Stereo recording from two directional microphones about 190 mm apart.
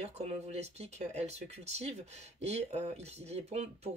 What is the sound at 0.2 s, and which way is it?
Speech, 35° right (ahead or behind).